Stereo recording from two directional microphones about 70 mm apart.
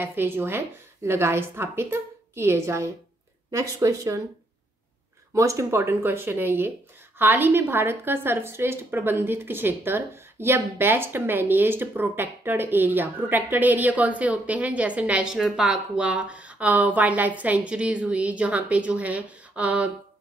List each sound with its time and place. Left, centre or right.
0.0 s a woman's voice: right
5.3 s a woman's voice: right; by 15.2 s centre
15.3 s speech: centre